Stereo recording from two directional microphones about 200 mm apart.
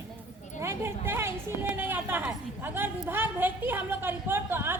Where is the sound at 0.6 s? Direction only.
15° right (ahead or behind).